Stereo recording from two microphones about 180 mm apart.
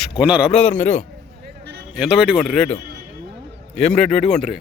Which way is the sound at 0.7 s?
45° left (ahead or behind).